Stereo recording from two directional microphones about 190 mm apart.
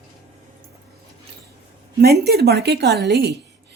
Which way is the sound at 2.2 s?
55° right (ahead or behind).